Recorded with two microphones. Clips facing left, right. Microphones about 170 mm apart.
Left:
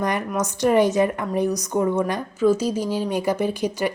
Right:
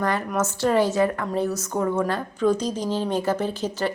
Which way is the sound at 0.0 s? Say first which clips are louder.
Even; 20° left (ahead or behind).